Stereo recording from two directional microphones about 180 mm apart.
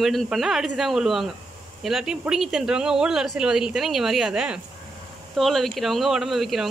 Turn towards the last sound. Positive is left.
turn(degrees=0)  # may be behind; listen again after turning